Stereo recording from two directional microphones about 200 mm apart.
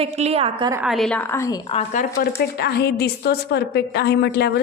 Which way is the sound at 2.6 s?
55° left (ahead or behind).